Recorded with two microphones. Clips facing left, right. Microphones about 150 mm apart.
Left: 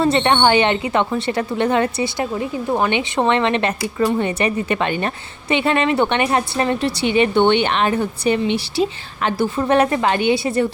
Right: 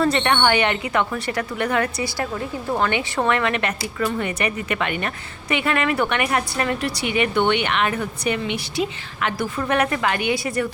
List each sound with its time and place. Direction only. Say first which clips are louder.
0.0 s a woman's voice: left 4 dB; 25° left (ahead or behind)